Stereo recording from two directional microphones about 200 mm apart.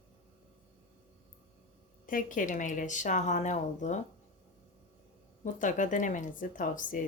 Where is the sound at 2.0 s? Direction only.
40° left (ahead or behind).